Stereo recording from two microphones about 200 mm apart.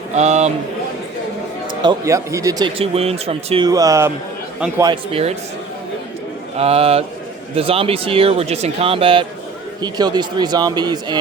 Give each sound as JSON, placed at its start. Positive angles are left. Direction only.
{"t": 0.1, "sound": "a man's voice", "side_deg": -35}
{"t": 1.8, "sound": "speech", "side_deg": -20}
{"t": 6.6, "sound": "speech", "side_deg": -30}